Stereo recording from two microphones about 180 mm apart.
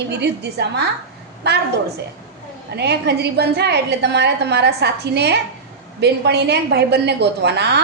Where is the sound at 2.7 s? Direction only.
70° right (ahead or behind).